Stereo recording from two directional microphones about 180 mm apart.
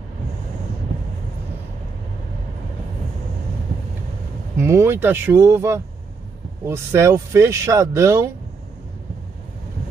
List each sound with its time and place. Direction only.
4.6 s speech: 15° right (ahead or behind)